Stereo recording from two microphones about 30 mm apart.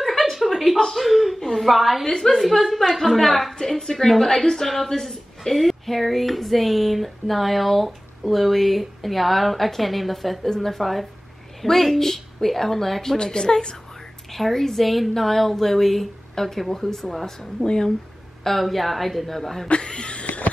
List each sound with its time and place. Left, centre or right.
0.0 s a sound: centre
0.9 s a woman's voice: centre
3.6 s a woman's voice: centre
13.2 s a woman's voice: left
14.3 s a woman's voice: centre
19.8 s speech: left